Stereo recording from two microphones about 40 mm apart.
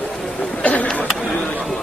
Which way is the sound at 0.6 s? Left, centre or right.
Left.